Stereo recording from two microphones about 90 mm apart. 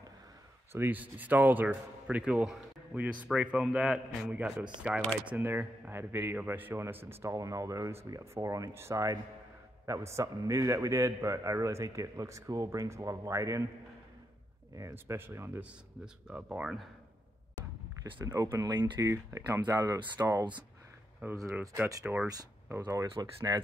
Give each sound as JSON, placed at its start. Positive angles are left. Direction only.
{"t": 0.7, "sound": "a man's voice", "side_deg": -20}
{"t": 7.3, "sound": "a man's voice", "side_deg": -40}
{"t": 14.8, "sound": "a man's voice", "side_deg": -35}
{"t": 15.1, "sound": "a man's voice", "side_deg": -25}
{"t": 16.3, "sound": "speech", "side_deg": -15}
{"t": 18.2, "sound": "a man's voice", "side_deg": -35}
{"t": 21.2, "sound": "a man's voice", "side_deg": -20}
{"t": 22.8, "sound": "a man's voice", "side_deg": -40}